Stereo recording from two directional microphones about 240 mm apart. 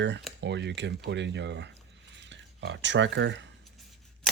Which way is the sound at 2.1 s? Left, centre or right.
Right.